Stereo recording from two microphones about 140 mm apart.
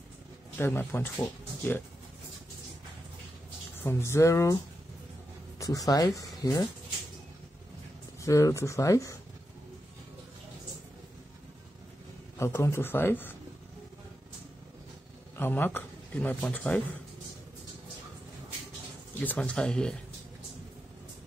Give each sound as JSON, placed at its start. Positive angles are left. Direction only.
{"t": 0.6, "sound": "speech", "side_deg": 15}
{"t": 3.8, "sound": "speech", "side_deg": 20}
{"t": 5.6, "sound": "speech", "side_deg": 25}
{"t": 8.2, "sound": "speech", "side_deg": 20}
{"t": 12.4, "sound": "speech", "side_deg": 15}
{"t": 15.3, "sound": "speech", "side_deg": 15}
{"t": 19.2, "sound": "speech", "side_deg": 10}